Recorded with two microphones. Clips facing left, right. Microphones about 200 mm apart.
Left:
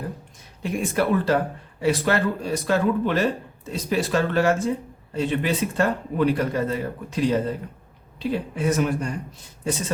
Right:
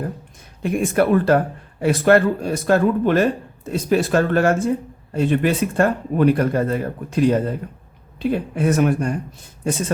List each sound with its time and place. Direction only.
0.6 s speech: 55° right (ahead or behind)